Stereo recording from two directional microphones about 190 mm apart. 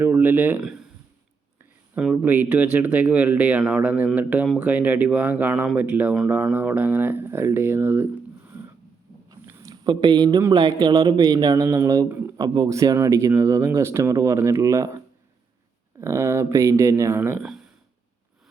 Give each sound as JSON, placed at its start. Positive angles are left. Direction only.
{"t": 0.0, "sound": "speech", "side_deg": -10}
{"t": 2.1, "sound": "a man's voice", "side_deg": -10}
{"t": 9.5, "sound": "a man's voice", "side_deg": -20}
{"t": 16.0, "sound": "a man's voice", "side_deg": -15}